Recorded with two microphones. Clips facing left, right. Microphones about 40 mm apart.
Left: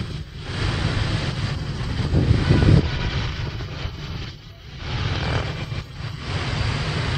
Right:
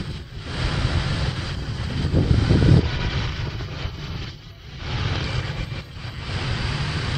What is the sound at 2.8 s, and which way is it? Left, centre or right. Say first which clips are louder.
Vehicle: even; centre.